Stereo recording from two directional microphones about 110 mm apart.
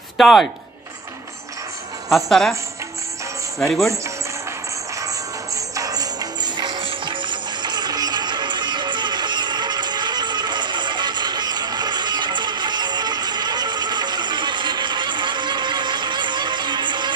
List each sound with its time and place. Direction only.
0.2 s speech: centre (ahead or behind)
2.0 s speech: centre (ahead or behind)
3.5 s speech: centre (ahead or behind)
5.8 s music: 35° right (ahead or behind)